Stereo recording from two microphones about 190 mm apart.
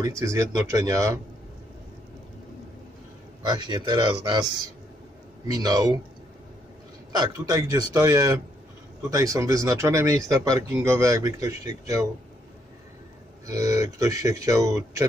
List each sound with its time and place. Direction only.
0.0 s speech: 15° right (ahead or behind)
3.4 s speech: 25° right (ahead or behind)
5.5 s speech: 20° right (ahead or behind)
7.1 s speech: 20° right (ahead or behind)
13.5 s speech: 15° right (ahead or behind)